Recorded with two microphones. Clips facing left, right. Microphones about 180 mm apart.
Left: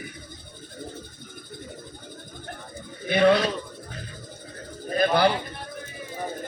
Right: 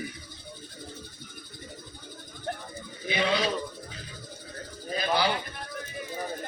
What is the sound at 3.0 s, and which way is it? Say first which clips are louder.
Speech: left 8 dB; 55° left (ahead or behind).